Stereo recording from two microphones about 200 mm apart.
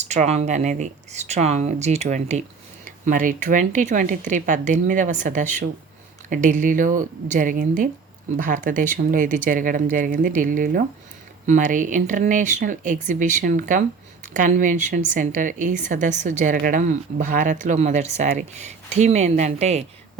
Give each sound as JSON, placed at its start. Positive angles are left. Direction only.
{"t": 0.0, "sound": "a woman's voice", "side_deg": -35}